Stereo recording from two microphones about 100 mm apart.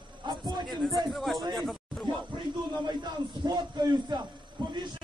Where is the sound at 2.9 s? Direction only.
45° right (ahead or behind).